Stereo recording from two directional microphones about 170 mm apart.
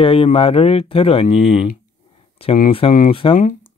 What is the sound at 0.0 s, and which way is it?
Speech, 35° left (ahead or behind).